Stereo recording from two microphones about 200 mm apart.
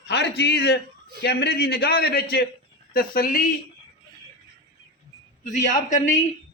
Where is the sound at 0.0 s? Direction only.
55° left (ahead or behind).